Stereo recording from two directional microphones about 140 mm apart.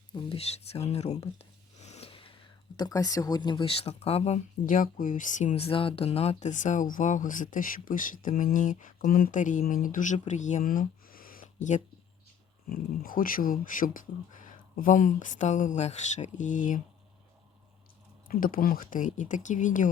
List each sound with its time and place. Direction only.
0.1 s a sound: 35° left (ahead or behind)
2.7 s speech: 25° left (ahead or behind); by 4.4 s 50° left (ahead or behind)
4.6 s speech: 70° left (ahead or behind)
12.6 s speech: 90° left; by 16.8 s 70° left (ahead or behind)
18.3 s speech: 90° left; by 19.9 s 65° left (ahead or behind)